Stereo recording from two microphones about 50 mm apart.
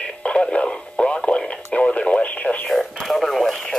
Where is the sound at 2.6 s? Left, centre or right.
Centre.